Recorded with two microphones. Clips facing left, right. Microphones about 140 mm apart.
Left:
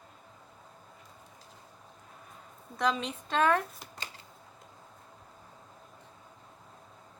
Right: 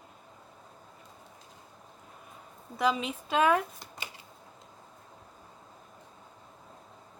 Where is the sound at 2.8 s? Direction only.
5° right (ahead or behind).